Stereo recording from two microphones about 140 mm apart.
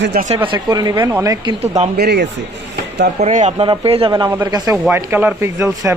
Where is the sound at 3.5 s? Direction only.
40° right (ahead or behind).